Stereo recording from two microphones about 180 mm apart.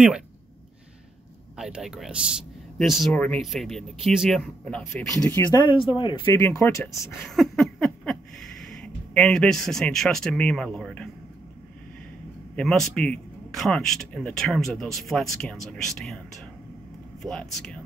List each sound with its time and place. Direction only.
1.6 s a man's voice: 5° right (ahead or behind)
5.4 s speech: 25° left (ahead or behind)
6.2 s speech: 15° left (ahead or behind)
7.2 s a sound: centre (ahead or behind)
8.8 s a man's voice: 5° left (ahead or behind)
12.5 s a man's voice: centre (ahead or behind)